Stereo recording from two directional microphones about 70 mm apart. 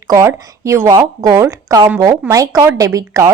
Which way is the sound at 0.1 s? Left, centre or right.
Right.